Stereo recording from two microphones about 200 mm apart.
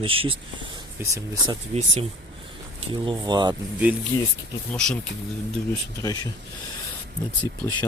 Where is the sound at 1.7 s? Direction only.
35° right (ahead or behind).